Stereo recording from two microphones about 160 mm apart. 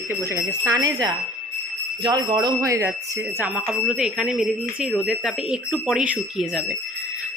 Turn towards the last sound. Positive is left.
turn(degrees=-5)  # may be behind; listen again after turning